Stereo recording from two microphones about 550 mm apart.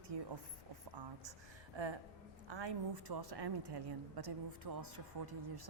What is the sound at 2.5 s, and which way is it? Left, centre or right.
A woman's voice, right.